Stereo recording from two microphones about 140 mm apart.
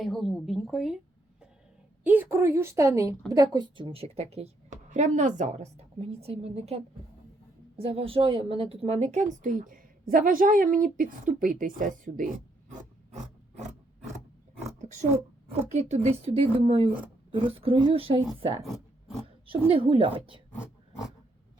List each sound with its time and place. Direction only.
0.0 s a woman's voice: centre (ahead or behind)
2.0 s speech: 15° right (ahead or behind); by 5.6 s 55° right (ahead or behind)
5.7 s a woman's voice: 45° right (ahead or behind); by 12.3 s 75° right (ahead or behind)
14.8 s a sound: 60° right (ahead or behind)
15.7 s a woman's voice: 55° right (ahead or behind)
18.6 s oink: centre (ahead or behind)
19.5 s speech: 40° right (ahead or behind)